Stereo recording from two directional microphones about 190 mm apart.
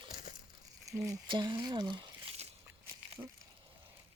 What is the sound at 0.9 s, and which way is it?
Speech, 15° right (ahead or behind).